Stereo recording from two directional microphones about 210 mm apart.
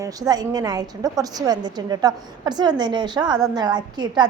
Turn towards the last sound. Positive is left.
turn(degrees=-20)  # may be behind; listen again after turning